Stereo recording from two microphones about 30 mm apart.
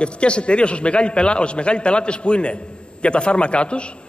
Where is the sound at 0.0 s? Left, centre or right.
Left.